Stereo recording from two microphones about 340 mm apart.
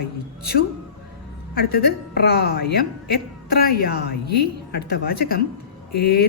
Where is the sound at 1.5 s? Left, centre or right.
Left.